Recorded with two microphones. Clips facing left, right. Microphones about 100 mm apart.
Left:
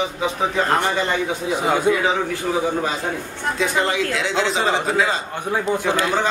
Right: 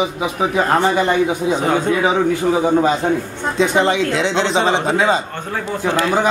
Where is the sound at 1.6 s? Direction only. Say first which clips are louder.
Left 1 dB; 10° left (ahead or behind).